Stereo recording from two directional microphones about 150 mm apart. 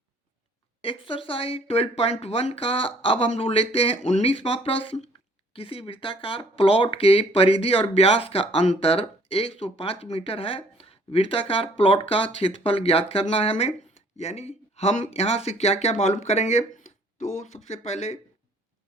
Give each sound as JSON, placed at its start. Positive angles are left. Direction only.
{"t": 0.8, "sound": "speech", "side_deg": 35}